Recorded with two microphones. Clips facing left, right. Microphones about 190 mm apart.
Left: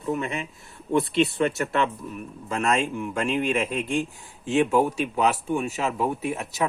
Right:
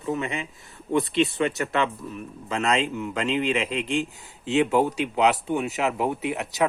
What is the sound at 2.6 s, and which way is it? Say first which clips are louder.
Speech: even; 20° right (ahead or behind).